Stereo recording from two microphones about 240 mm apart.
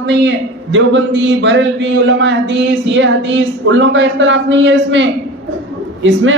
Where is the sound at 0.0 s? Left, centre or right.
Right.